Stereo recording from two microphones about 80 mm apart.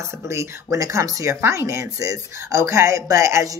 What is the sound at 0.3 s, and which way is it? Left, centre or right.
Speech, right.